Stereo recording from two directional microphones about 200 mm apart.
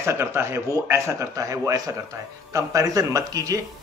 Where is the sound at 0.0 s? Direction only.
10° right (ahead or behind).